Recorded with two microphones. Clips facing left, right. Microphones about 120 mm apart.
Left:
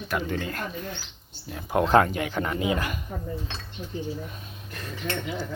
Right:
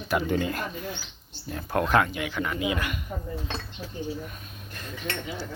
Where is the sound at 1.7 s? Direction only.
30° left (ahead or behind).